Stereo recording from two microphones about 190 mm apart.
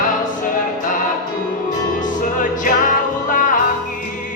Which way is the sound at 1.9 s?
45° left (ahead or behind).